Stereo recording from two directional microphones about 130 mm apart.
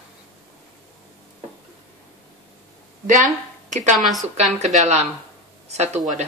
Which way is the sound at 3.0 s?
75° right (ahead or behind).